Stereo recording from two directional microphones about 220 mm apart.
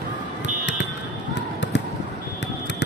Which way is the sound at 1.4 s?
55° left (ahead or behind).